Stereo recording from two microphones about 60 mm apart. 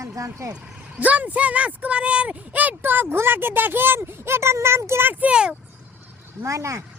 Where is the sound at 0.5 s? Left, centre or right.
Right.